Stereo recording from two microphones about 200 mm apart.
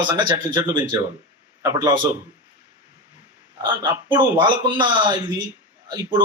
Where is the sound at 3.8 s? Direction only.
25° right (ahead or behind).